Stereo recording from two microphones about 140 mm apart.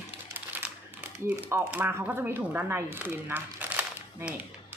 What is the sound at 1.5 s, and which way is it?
Speech, 15° right (ahead or behind).